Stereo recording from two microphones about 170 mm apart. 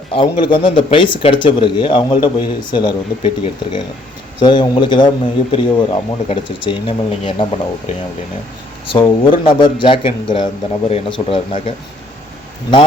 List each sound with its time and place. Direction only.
0.1 s a man's voice: 30° left (ahead or behind)